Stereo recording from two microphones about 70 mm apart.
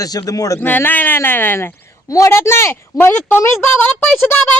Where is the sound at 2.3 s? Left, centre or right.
Left.